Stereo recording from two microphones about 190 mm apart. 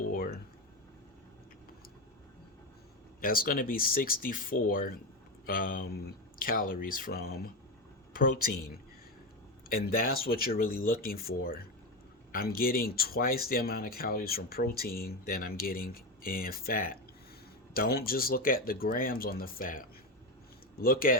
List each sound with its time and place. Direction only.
0.1 s a sound: 50° left (ahead or behind)
3.2 s speech: 50° left (ahead or behind)
9.6 s speech: 50° left (ahead or behind)